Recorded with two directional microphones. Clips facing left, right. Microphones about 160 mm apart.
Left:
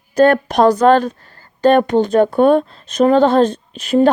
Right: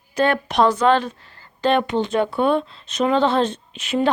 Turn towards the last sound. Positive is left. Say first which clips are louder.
# left 8 dB
turn(degrees=40)  # may be behind; listen again after turning